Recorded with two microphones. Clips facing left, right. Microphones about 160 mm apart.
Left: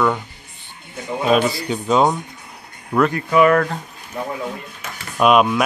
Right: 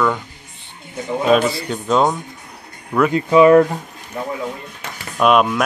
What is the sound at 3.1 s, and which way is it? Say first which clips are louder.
Speech: right 6 dB; 20° right (ahead or behind).